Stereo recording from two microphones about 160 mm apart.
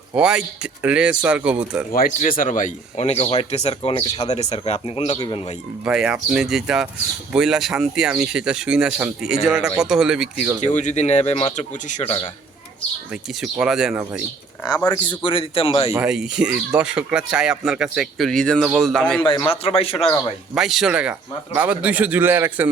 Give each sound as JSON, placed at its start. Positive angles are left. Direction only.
{"t": 0.2, "sound": "a man's voice", "side_deg": -5}
{"t": 1.9, "sound": "speech", "side_deg": 60}
{"t": 5.8, "sound": "speech", "side_deg": -5}
{"t": 10.6, "sound": "speech", "side_deg": 45}
{"t": 13.4, "sound": "speech", "side_deg": -5}
{"t": 14.6, "sound": "speech", "side_deg": 25}
{"t": 15.9, "sound": "speech", "side_deg": -10}
{"t": 19.2, "sound": "speech", "side_deg": 30}
{"t": 20.6, "sound": "a man's voice", "side_deg": 0}